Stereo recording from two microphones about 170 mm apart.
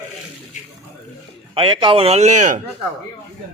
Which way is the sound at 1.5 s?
30° right (ahead or behind).